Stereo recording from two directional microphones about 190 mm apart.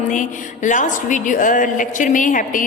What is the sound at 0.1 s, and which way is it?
A woman's voice, 40° left (ahead or behind).